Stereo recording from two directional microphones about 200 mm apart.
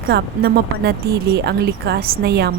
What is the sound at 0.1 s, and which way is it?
Speech, 55° right (ahead or behind).